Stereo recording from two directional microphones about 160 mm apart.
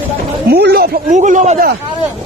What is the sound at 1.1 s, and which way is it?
Speech, 50° right (ahead or behind).